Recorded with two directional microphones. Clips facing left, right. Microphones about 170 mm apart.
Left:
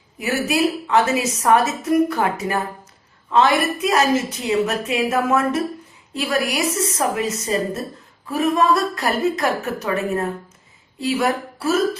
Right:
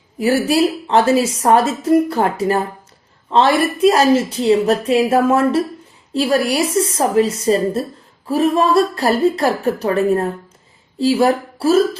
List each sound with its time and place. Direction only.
0.2 s a woman's voice: 30° right (ahead or behind)